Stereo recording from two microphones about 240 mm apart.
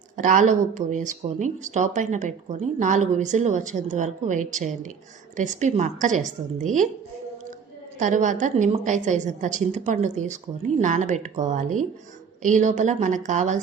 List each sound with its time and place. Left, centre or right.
0.2 s speech: right
7.9 s speech: right